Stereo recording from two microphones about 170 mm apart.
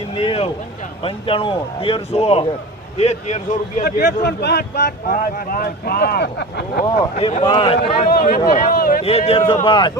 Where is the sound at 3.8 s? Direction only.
70° left (ahead or behind).